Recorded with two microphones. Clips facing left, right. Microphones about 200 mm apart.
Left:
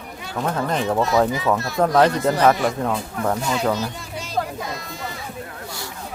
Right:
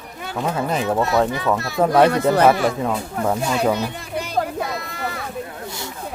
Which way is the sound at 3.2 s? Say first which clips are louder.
Right 2 dB; 10° right (ahead or behind).